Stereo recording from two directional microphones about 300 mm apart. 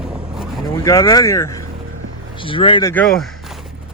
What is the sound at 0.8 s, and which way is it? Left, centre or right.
Speech, centre.